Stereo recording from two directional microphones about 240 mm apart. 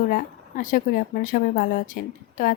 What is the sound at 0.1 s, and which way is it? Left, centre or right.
Speech, left.